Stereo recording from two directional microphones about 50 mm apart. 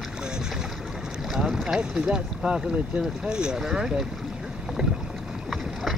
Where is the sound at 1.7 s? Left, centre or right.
Centre.